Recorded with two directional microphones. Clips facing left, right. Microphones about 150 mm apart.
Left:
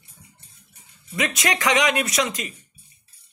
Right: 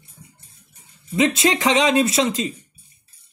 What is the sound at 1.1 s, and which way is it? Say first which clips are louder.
Speech: right 7 dB; 25° right (ahead or behind).